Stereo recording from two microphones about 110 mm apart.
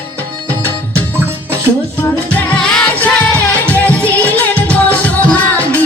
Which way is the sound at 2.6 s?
5° left (ahead or behind).